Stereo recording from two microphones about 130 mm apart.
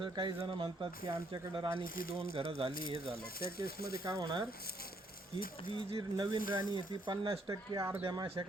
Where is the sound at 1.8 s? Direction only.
90° left.